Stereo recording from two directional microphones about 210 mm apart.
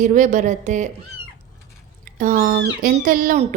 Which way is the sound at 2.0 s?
40° right (ahead or behind).